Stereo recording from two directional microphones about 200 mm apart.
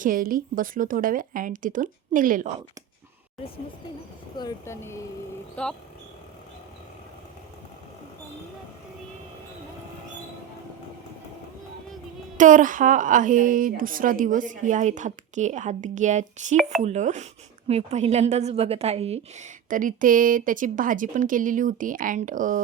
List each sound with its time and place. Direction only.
0.0 s speech: 45° right (ahead or behind)
4.4 s speech: 15° left (ahead or behind)
12.4 s a woman's voice: 40° right (ahead or behind)